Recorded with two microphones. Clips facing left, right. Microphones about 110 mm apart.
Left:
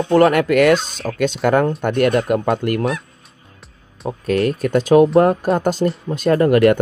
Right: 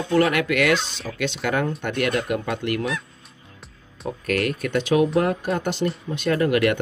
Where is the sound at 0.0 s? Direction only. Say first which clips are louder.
Left 7 dB; 45° left (ahead or behind).